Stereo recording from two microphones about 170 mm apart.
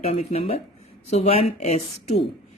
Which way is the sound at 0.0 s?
40° left (ahead or behind).